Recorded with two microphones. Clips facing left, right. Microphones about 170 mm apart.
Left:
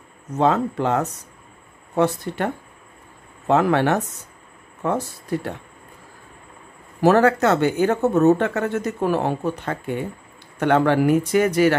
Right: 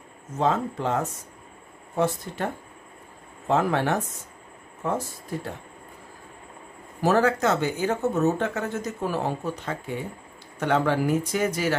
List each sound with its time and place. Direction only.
0.4 s speech: 70° left (ahead or behind)
7.0 s speech: 65° left (ahead or behind)